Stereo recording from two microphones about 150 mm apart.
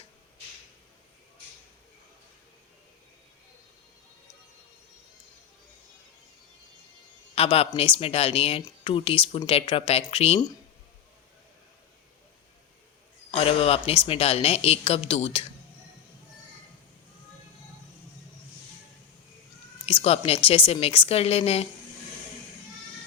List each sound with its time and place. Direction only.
7.3 s a woman's voice: 40° left (ahead or behind)
13.3 s a woman's voice: 40° left (ahead or behind)
19.8 s a woman's voice: 40° left (ahead or behind)